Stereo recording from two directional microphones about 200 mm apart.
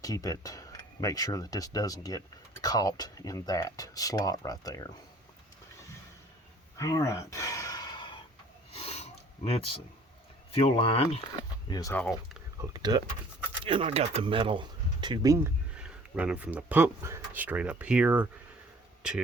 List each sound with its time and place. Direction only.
0.0 s speech: 20° left (ahead or behind)
6.7 s a sound: 15° left (ahead or behind)
10.5 s speech: 30° left (ahead or behind)
11.7 s speech: 20° left (ahead or behind)
12.7 s speech: 20° right (ahead or behind)